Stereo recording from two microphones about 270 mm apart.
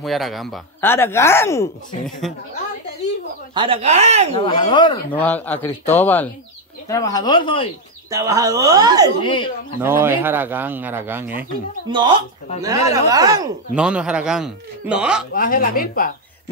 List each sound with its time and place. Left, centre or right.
0.0 s speech: centre
3.5 s speech: centre
4.4 s speech: centre
5.2 s speech: centre
8.1 s speech: centre
9.2 s speech: centre
9.8 s a man's voice: centre
15.3 s a woman's voice: left